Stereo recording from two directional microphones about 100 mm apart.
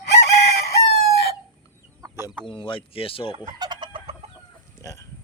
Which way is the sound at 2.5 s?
55° left (ahead or behind).